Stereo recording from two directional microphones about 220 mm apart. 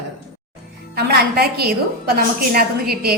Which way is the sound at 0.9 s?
45° right (ahead or behind).